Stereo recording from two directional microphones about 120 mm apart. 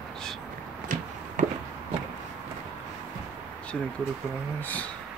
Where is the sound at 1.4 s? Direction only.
90° right.